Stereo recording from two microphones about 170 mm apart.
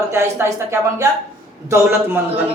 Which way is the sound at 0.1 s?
15° right (ahead or behind).